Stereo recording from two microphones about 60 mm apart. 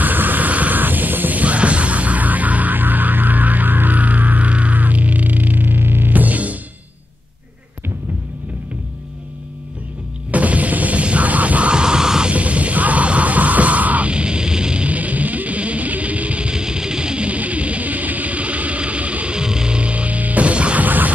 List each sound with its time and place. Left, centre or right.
0.0 s music: right
10.3 s music: right